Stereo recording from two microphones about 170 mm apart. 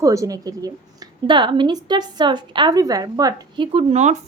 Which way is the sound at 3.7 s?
40° right (ahead or behind).